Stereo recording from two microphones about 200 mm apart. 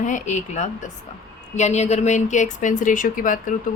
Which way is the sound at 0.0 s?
40° left (ahead or behind).